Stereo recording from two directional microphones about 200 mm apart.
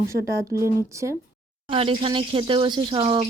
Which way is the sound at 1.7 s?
25° right (ahead or behind).